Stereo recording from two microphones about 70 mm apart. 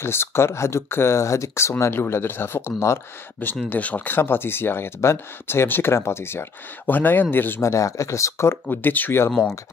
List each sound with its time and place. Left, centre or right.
0.0 s speech: left
3.6 s speech: left
7.6 s speech: left
8.6 s speech: left